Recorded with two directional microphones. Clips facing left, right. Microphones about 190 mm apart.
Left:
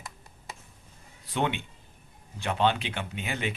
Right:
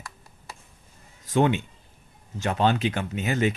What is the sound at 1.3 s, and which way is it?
Speech, 45° right (ahead or behind).